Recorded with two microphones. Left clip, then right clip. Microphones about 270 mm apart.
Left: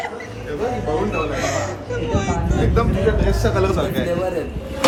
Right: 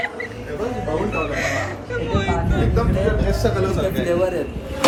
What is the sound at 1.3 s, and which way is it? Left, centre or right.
Music, centre.